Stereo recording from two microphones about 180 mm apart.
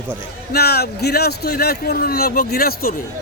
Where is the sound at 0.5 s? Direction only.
60° left (ahead or behind).